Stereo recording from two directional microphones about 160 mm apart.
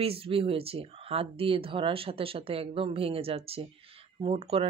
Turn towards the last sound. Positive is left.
turn(degrees=-35)  # may be behind; listen again after turning